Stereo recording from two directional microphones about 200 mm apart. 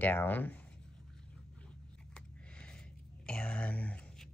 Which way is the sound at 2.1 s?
5° left (ahead or behind).